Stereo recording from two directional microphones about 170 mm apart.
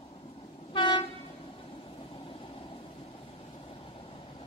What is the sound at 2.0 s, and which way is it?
Vehicle, 30° left (ahead or behind).